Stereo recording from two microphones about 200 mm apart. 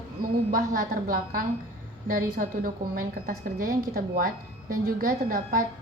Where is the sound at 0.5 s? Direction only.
40° right (ahead or behind).